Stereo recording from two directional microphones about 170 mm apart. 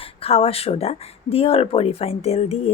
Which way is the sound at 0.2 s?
35° left (ahead or behind).